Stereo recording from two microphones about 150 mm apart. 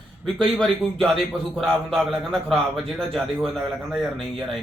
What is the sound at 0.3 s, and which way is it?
A man's voice, centre (ahead or behind).